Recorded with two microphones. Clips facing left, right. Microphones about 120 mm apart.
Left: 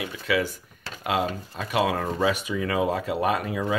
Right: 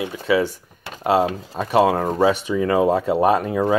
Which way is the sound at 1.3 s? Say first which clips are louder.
Right 4 dB; 90° right.